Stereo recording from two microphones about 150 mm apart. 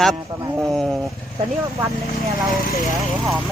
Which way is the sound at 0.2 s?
20° right (ahead or behind).